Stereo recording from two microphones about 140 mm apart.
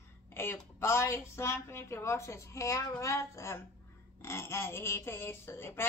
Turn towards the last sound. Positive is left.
turn(degrees=15)  # may be behind; listen again after turning